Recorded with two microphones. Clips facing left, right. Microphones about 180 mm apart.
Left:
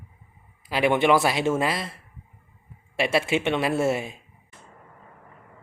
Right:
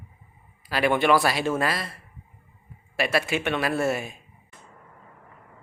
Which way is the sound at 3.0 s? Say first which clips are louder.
Left 2 dB; 25° left (ahead or behind).